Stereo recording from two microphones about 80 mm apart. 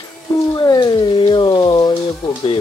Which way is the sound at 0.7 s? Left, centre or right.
Left.